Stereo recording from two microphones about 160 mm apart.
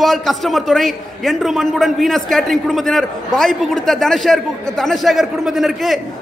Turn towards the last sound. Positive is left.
turn(degrees=0)  # may be behind; listen again after turning